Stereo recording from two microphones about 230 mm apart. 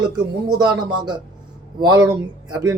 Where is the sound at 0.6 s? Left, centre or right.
Centre.